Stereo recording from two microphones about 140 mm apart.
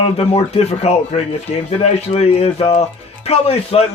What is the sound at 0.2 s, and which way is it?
Speech, 45° left (ahead or behind).